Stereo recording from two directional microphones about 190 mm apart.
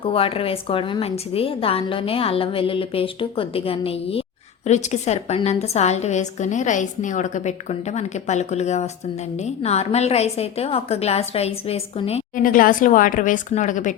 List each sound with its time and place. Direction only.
0.0 s a woman's voice: 30° left (ahead or behind)
12.4 s a woman's voice: 45° left (ahead or behind)